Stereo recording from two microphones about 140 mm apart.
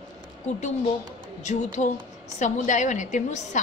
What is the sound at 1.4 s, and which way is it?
A woman's voice, 55° left (ahead or behind).